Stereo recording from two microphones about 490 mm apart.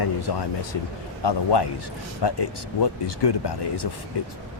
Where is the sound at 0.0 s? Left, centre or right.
Left.